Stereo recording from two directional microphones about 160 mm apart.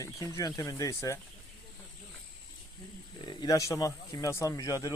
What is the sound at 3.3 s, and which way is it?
Speech, 25° left (ahead or behind).